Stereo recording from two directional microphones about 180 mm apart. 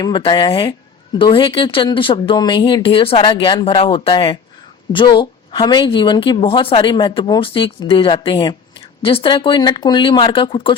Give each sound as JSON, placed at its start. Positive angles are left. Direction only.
{"t": 0.0, "sound": "a woman's voice", "side_deg": 25}